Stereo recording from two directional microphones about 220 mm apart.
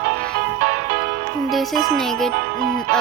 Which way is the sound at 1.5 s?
Centre (ahead or behind).